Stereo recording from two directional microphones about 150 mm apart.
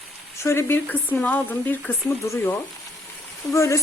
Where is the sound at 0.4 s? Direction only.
15° left (ahead or behind).